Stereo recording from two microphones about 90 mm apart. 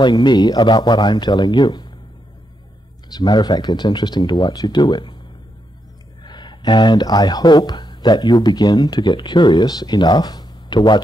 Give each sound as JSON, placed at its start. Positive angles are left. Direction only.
{"t": 0.0, "sound": "speech", "side_deg": 55}
{"t": 3.1, "sound": "speech", "side_deg": 50}
{"t": 6.2, "sound": "speech", "side_deg": 55}